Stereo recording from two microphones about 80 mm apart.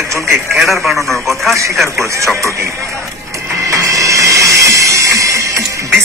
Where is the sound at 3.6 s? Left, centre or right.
Right.